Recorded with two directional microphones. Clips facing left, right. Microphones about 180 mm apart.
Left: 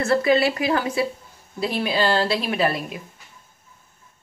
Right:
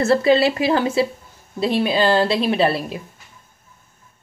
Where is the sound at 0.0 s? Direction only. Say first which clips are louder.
Right 3 dB; 30° right (ahead or behind).